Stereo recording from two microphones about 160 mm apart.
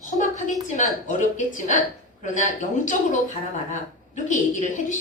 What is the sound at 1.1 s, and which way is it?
A woman's voice, 50° left (ahead or behind).